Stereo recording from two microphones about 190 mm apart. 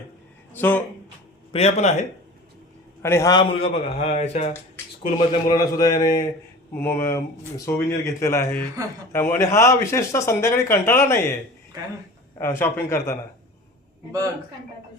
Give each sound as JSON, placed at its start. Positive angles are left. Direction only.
{"t": 0.5, "sound": "speech", "side_deg": 10}
{"t": 1.5, "sound": "a man's voice", "side_deg": 35}
{"t": 3.0, "sound": "a man's voice", "side_deg": 15}
{"t": 5.3, "sound": "a man's voice", "side_deg": 20}
{"t": 12.4, "sound": "speech", "side_deg": 10}